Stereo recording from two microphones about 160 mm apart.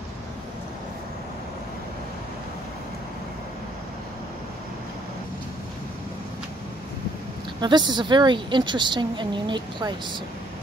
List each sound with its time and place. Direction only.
7.6 s a woman's voice: 30° right (ahead or behind)